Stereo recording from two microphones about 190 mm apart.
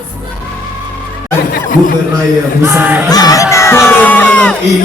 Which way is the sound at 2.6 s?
10° right (ahead or behind).